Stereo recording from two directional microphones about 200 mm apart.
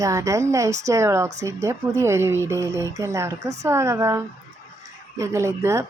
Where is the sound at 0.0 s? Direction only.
15° right (ahead or behind).